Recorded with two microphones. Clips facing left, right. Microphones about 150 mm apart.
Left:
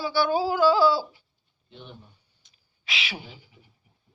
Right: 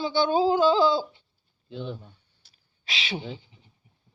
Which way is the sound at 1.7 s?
90° right.